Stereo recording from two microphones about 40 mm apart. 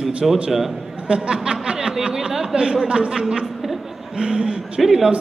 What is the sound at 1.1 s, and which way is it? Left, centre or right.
Speech, right.